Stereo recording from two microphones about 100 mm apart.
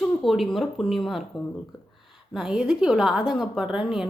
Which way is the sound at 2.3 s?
5° right (ahead or behind).